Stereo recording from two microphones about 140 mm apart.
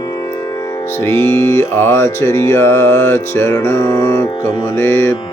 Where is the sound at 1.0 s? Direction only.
15° left (ahead or behind).